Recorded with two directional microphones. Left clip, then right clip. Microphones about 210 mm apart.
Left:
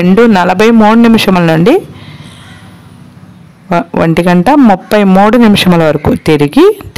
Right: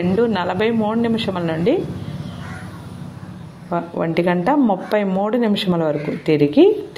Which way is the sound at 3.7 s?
50° left (ahead or behind).